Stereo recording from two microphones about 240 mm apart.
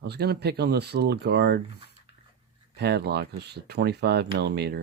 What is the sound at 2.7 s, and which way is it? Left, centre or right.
Speech, right.